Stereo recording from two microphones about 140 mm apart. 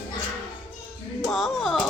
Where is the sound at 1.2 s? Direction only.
Centre (ahead or behind).